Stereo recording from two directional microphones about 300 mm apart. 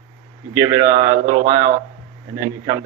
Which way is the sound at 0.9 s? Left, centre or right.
Right.